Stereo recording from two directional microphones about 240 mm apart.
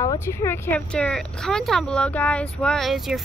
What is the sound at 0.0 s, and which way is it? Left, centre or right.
Speech, centre.